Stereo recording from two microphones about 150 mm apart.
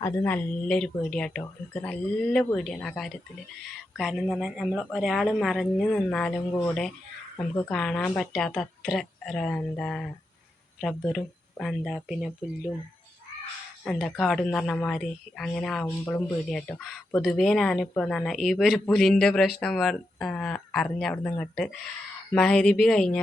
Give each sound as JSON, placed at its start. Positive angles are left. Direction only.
{"t": 0.0, "sound": "a woman's voice", "side_deg": 15}
{"t": 13.8, "sound": "a woman's voice", "side_deg": 5}